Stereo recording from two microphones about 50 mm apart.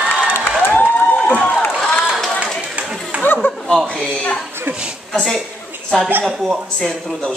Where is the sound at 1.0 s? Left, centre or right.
Left.